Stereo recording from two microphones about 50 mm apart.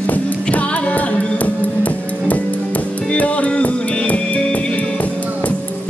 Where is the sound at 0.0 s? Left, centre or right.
Left.